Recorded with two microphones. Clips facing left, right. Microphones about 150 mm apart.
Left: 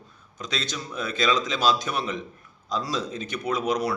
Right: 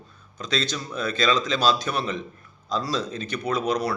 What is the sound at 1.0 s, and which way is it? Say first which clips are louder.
A man's voice: right 1 dB; 15° left (ahead or behind).